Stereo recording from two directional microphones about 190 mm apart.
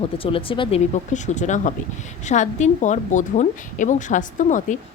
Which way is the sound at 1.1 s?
40° left (ahead or behind).